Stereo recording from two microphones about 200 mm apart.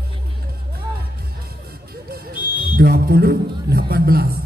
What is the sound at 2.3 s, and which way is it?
Speech, 50° right (ahead or behind).